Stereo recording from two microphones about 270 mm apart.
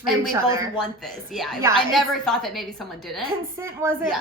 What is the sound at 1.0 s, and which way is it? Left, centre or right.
A woman's voice, centre.